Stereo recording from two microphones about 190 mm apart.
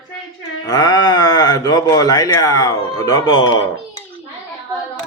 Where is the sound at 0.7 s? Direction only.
20° left (ahead or behind).